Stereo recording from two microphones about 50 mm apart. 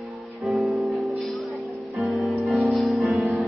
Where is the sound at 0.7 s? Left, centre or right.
Centre.